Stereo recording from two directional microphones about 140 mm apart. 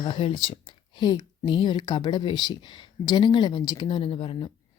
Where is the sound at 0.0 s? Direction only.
40° left (ahead or behind).